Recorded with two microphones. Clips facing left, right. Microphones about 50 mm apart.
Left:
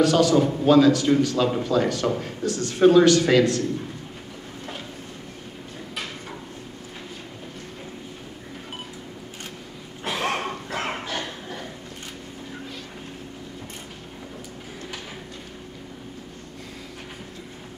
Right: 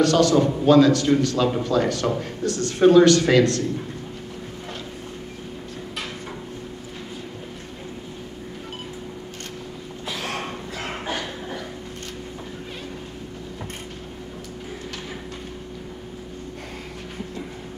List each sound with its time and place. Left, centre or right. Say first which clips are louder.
0.0 s a man's voice: right 1 dB; centre
2.4 s a man's voice: right 1 dB; centre
10.0 s a sound: left 4 dB; left